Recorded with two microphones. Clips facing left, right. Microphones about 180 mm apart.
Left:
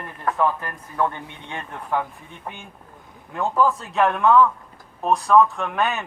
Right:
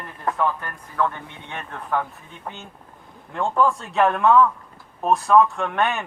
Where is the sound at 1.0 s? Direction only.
15° left (ahead or behind).